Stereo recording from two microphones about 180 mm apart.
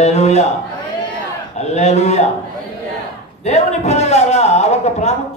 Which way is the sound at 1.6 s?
40° left (ahead or behind).